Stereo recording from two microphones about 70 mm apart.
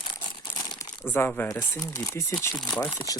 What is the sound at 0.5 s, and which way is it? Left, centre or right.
Crumpling, left.